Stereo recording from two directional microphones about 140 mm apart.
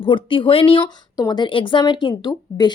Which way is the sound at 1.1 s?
30° left (ahead or behind).